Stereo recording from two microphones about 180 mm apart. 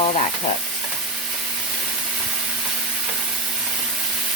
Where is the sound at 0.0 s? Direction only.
35° left (ahead or behind).